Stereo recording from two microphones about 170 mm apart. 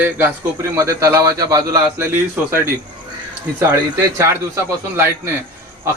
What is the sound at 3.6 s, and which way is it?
Speech, 15° right (ahead or behind).